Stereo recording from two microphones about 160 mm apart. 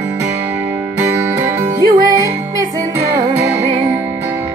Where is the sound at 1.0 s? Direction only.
15° right (ahead or behind); by 3.9 s 30° right (ahead or behind).